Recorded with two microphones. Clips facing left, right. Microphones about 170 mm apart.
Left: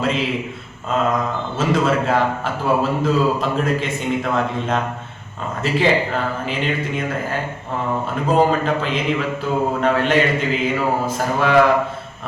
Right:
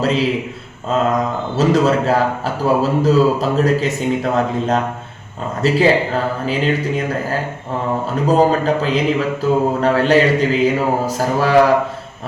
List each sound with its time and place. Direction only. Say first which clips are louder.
0.0 s a man's voice: right 4 dB; 35° right (ahead or behind)
1.5 s a man's voice: right 4 dB; 40° right (ahead or behind)